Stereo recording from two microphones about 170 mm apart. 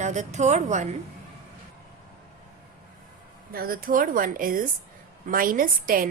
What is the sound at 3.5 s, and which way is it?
A woman's voice, 60° right (ahead or behind).